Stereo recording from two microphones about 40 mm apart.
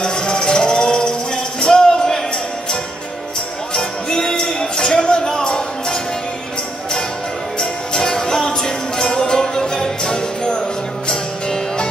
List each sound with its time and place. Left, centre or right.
0.0 s music: centre
3.7 s music: centre
7.5 s music: centre